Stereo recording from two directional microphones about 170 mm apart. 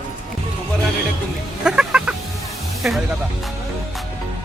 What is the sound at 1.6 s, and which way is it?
Chicken, 5° right (ahead or behind).